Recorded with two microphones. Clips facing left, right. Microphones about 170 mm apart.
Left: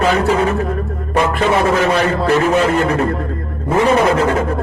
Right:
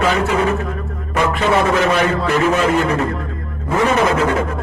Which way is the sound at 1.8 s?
35° left (ahead or behind).